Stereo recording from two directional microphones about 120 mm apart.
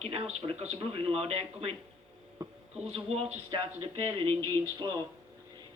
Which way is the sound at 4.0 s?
50° right (ahead or behind).